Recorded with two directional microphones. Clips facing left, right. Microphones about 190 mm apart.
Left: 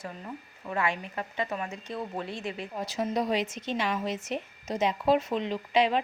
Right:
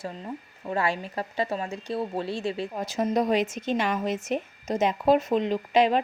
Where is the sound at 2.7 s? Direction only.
45° right (ahead or behind).